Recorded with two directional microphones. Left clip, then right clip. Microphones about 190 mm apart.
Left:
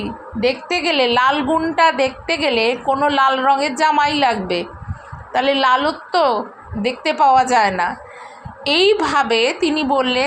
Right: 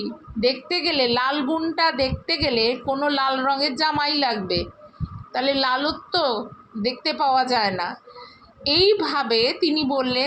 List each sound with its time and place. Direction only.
0.0 s a woman's voice: 20° left (ahead or behind)